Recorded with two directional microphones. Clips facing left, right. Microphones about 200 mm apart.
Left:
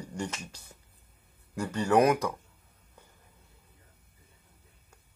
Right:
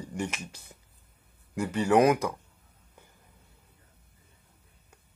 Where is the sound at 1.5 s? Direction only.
10° right (ahead or behind).